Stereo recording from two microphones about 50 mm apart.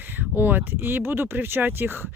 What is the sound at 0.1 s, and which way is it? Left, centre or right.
Speech, right.